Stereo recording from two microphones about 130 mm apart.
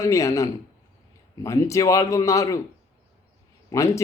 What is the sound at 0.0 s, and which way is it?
Speech, 25° left (ahead or behind).